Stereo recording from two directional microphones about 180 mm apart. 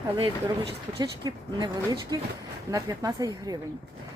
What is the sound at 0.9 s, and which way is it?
Speech, 25° right (ahead or behind).